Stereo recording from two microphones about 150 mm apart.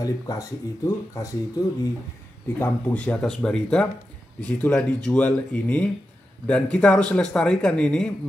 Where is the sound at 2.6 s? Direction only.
10° left (ahead or behind).